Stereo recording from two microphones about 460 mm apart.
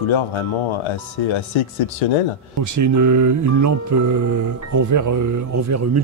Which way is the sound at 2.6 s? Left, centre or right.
Right.